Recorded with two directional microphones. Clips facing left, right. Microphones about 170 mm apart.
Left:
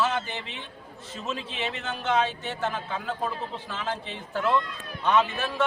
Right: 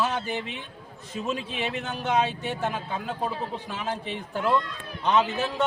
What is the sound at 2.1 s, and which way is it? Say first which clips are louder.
A man's voice: even; 15° right (ahead or behind).